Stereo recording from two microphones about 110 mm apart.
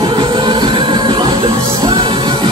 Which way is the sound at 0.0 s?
50° right (ahead or behind).